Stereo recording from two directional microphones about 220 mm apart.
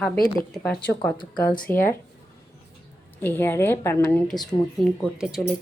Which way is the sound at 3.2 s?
10° left (ahead or behind).